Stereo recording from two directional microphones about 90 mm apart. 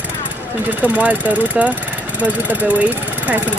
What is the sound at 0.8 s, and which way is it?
Speech, 15° right (ahead or behind).